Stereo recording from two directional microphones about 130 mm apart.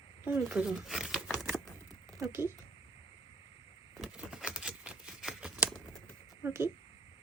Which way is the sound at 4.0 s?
5° right (ahead or behind).